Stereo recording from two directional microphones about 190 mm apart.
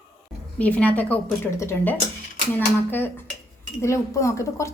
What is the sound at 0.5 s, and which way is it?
Speech, 10° left (ahead or behind).